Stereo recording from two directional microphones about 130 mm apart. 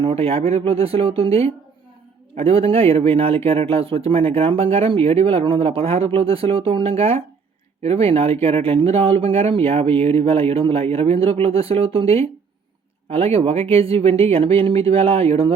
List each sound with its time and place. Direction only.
0.0 s speech: 50° right (ahead or behind)